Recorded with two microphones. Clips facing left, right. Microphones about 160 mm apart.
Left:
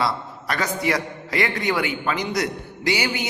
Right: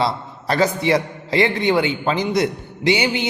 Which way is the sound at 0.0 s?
30° right (ahead or behind).